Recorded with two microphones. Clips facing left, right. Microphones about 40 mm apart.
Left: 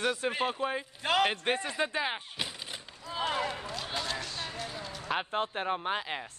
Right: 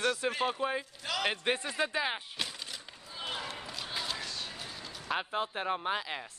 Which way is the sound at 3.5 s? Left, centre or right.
Centre.